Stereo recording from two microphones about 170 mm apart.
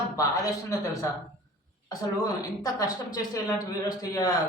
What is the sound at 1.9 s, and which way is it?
A man's voice, 20° left (ahead or behind).